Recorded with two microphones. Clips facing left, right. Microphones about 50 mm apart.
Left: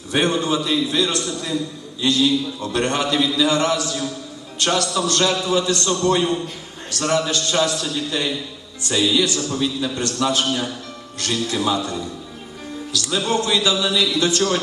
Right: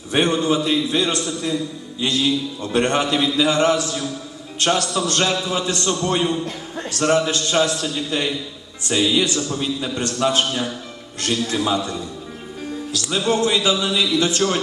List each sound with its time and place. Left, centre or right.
0.1 s a man's voice: right